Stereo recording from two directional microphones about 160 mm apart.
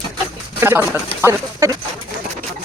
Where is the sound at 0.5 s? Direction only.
15° right (ahead or behind).